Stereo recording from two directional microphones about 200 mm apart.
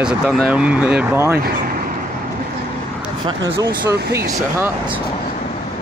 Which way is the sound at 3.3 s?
25° right (ahead or behind).